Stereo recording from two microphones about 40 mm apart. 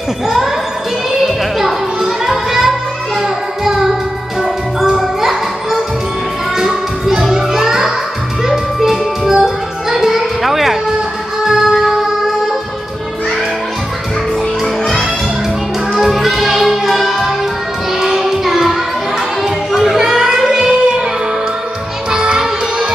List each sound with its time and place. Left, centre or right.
1.2 s music: centre
16.0 s music: centre
20.0 s child singing: centre
22.1 s music: right